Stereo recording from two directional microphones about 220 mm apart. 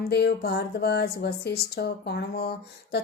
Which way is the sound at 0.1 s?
50° left (ahead or behind).